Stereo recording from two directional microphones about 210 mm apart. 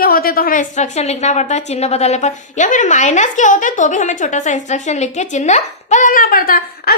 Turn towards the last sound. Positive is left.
turn(degrees=45)  # may be behind; listen again after turning